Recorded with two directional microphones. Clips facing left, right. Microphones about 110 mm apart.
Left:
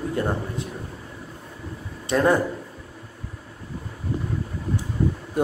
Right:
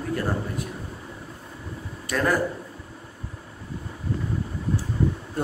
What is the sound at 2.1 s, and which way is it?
Speech, 25° left (ahead or behind).